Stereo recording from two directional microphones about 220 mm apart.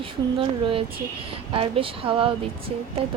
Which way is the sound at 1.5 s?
25° right (ahead or behind).